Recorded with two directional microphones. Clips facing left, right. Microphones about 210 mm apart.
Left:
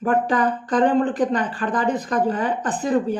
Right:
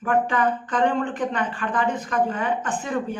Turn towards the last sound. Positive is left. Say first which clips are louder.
# left 6 dB
turn(degrees=35)  # may be behind; listen again after turning